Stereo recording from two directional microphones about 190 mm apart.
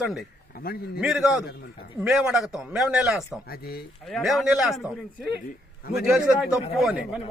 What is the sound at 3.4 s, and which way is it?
Speech, 50° left (ahead or behind).